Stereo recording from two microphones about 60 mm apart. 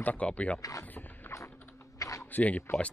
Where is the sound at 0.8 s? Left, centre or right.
Left.